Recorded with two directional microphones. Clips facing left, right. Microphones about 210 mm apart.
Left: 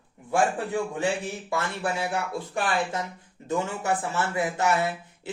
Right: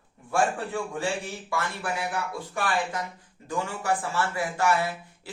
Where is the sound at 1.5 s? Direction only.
25° left (ahead or behind).